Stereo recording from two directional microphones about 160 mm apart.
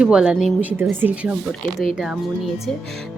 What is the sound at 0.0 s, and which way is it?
Speech, 5° right (ahead or behind).